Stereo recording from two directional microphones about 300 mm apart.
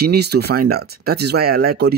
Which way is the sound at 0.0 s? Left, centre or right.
Right.